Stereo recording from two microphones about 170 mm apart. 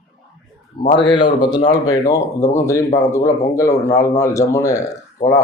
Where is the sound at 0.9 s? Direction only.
30° left (ahead or behind).